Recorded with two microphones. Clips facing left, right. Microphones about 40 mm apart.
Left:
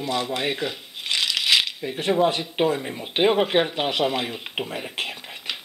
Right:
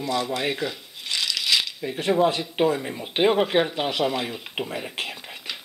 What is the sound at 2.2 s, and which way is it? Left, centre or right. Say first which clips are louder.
Speech: even; centre.